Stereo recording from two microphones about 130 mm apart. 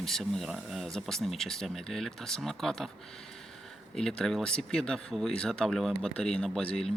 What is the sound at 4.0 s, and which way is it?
Speech, 5° left (ahead or behind).